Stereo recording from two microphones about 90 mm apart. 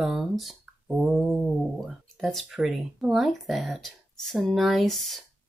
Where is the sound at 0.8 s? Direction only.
10° right (ahead or behind).